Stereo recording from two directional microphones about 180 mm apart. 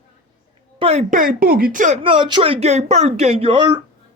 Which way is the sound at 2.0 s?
25° right (ahead or behind).